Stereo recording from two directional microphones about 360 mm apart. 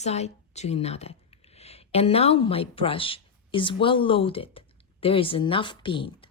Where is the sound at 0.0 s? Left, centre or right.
Centre.